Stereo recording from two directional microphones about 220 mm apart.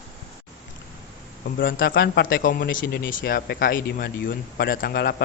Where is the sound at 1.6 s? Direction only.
40° left (ahead or behind).